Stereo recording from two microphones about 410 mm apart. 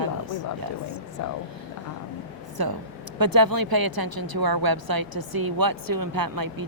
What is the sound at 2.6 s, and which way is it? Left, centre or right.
Speech, right.